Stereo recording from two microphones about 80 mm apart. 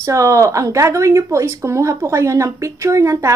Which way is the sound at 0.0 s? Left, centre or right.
Right.